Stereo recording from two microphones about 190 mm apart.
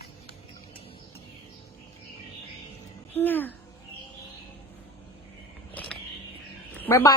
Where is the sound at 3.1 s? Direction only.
10° left (ahead or behind).